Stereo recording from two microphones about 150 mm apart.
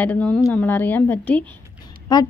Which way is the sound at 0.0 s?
10° left (ahead or behind).